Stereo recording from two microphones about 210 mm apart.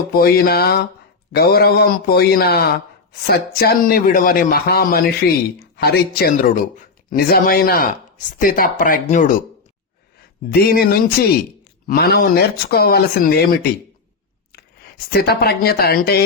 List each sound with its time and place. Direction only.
0.1 s speech: 45° left (ahead or behind)
10.5 s speech: 45° left (ahead or behind)